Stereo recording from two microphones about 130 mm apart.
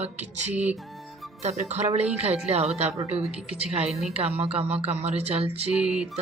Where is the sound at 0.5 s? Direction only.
10° right (ahead or behind).